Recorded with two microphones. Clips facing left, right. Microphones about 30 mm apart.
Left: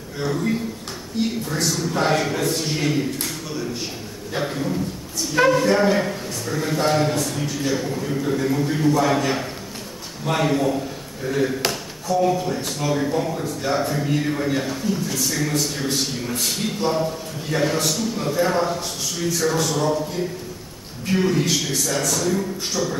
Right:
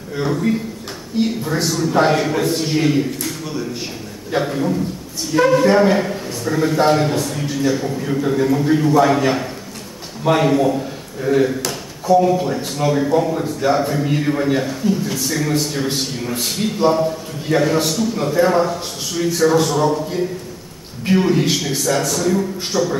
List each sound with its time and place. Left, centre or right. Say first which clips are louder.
0.2 s a man's voice: right 4 dB; centre
8.0 s a man's voice: right 5 dB; centre
21.1 s a man's voice: right 4 dB; centre